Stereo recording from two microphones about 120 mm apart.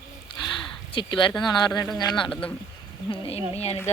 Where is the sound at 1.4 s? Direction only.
35° left (ahead or behind).